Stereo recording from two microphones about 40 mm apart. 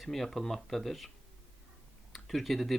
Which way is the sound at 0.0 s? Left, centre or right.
Centre.